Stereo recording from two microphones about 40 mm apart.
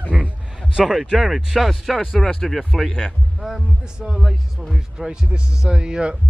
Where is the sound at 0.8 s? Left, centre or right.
Right.